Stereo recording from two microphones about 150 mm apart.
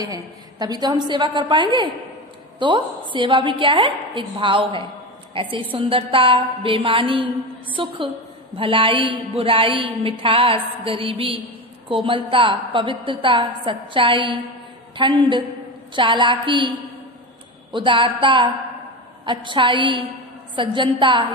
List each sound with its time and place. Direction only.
0.0 s a woman's voice: 25° right (ahead or behind)
17.7 s a woman's voice: 35° right (ahead or behind)